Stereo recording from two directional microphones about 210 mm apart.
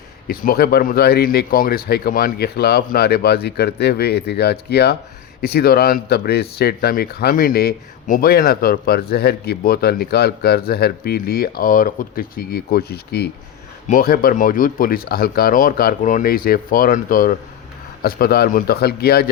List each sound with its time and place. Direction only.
0.3 s speech: 45° left (ahead or behind)